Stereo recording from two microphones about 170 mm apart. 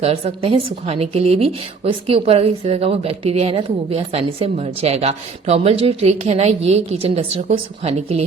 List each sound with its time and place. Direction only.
0.0 s speech: 35° right (ahead or behind)